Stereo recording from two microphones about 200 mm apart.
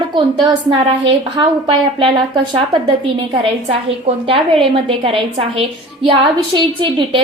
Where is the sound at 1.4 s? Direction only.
25° right (ahead or behind).